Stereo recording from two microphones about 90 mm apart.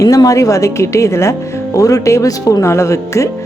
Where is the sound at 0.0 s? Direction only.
40° left (ahead or behind).